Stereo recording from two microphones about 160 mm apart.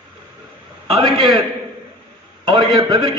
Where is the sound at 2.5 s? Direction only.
30° right (ahead or behind).